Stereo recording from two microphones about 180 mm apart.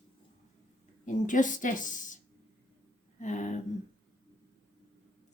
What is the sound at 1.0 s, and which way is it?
A woman's voice, 45° left (ahead or behind).